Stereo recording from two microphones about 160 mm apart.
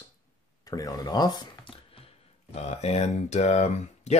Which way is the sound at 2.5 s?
45° left (ahead or behind).